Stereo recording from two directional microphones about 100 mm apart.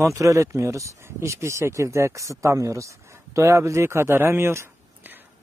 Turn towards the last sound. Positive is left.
turn(degrees=-25)  # may be behind; listen again after turning